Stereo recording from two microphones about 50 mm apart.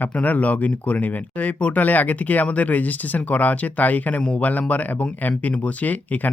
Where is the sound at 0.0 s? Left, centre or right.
Left.